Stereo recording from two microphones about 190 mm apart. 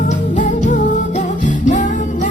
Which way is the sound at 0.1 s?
40° left (ahead or behind).